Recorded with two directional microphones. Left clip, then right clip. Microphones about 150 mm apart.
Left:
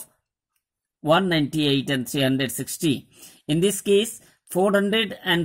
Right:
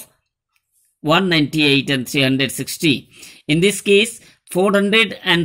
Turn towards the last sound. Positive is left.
turn(degrees=40)  # may be behind; listen again after turning